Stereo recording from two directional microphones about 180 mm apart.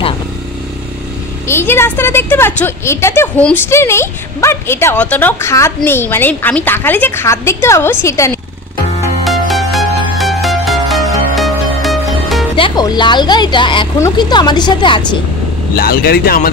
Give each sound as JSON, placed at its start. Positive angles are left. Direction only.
{"t": 1.5, "sound": "a woman's voice", "side_deg": 15}
{"t": 9.2, "sound": "music", "side_deg": 0}
{"t": 12.5, "sound": "speech", "side_deg": 25}
{"t": 15.7, "sound": "speech", "side_deg": 55}